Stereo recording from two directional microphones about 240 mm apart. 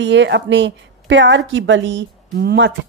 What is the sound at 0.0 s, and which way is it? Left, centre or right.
Speech, right.